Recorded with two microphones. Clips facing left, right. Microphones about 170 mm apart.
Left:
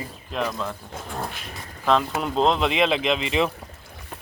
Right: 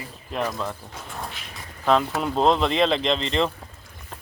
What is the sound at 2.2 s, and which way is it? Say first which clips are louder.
Speech: right 1 dB; centre (ahead or behind).